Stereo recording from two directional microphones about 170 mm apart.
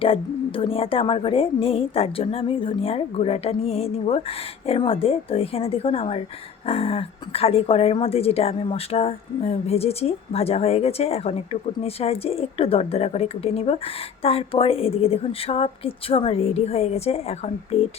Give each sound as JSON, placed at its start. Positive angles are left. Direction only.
{"t": 0.0, "sound": "a woman's voice", "side_deg": 30}